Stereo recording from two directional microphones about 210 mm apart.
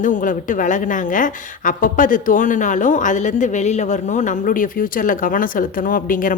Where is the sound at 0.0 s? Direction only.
40° left (ahead or behind).